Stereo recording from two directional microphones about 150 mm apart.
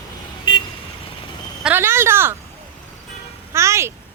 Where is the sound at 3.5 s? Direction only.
20° right (ahead or behind).